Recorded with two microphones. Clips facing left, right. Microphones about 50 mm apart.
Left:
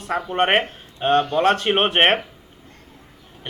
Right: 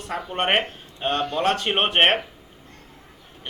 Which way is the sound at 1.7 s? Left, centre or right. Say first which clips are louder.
Left 2 dB; centre.